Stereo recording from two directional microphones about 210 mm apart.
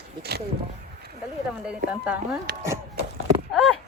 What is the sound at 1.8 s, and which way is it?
Speech, 5° right (ahead or behind).